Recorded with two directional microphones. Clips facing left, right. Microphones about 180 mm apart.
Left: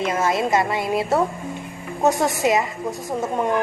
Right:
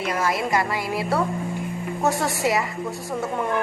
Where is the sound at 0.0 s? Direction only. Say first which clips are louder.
Left 3 dB; 20° left (ahead or behind).